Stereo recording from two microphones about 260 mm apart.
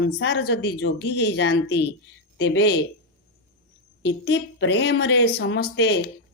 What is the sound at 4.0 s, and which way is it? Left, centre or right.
A woman's voice, left.